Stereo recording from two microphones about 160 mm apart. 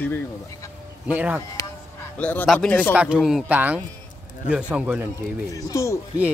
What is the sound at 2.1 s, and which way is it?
Speech, 10° left (ahead or behind).